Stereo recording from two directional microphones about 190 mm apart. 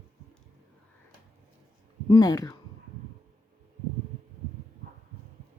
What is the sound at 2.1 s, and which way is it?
Speech, 20° left (ahead or behind).